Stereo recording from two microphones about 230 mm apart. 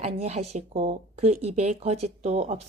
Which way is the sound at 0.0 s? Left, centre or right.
Right.